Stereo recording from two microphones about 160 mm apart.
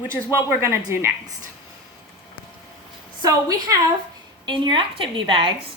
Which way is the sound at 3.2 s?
20° right (ahead or behind).